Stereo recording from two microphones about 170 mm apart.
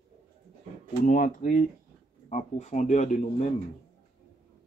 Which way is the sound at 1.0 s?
50° left (ahead or behind).